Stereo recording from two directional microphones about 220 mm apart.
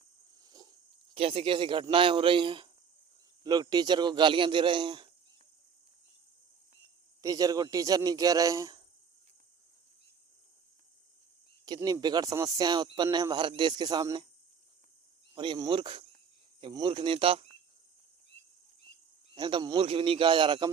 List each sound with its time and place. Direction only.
0.4 s a sound: 20° right (ahead or behind)
1.1 s speech: 25° right (ahead or behind)
7.2 s a man's voice: 15° right (ahead or behind)
11.6 s speech: 20° right (ahead or behind)
15.4 s speech: 20° right (ahead or behind)
19.3 s speech: 20° right (ahead or behind)